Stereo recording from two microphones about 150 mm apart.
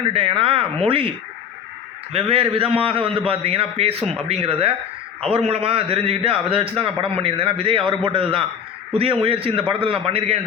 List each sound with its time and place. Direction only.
0.0 s a man's voice: 40° right (ahead or behind)
2.1 s a man's voice: 40° right (ahead or behind)